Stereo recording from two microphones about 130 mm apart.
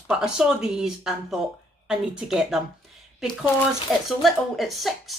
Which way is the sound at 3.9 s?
Centre (ahead or behind).